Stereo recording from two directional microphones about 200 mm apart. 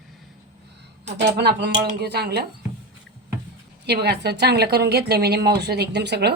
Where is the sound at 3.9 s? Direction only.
55° right (ahead or behind).